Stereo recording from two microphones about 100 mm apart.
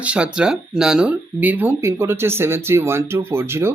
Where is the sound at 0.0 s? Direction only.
10° right (ahead or behind).